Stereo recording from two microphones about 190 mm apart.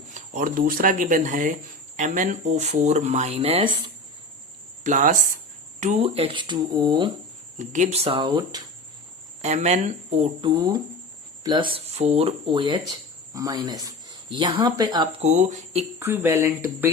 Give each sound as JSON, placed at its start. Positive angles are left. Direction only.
{"t": 0.1, "sound": "speech", "side_deg": -45}
{"t": 4.8, "sound": "speech", "side_deg": -40}
{"t": 7.6, "sound": "speech", "side_deg": -40}
{"t": 9.4, "sound": "speech", "side_deg": -35}
{"t": 10.5, "sound": "speech", "side_deg": -20}
{"t": 15.2, "sound": "speech", "side_deg": -40}
{"t": 16.0, "sound": "speech", "side_deg": -15}